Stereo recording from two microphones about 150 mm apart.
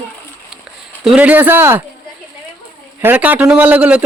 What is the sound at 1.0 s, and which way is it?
Speech, 5° right (ahead or behind).